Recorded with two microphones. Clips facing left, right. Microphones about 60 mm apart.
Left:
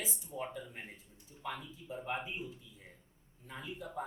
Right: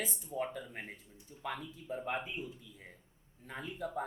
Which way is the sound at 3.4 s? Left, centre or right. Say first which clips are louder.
Right 4 dB; right.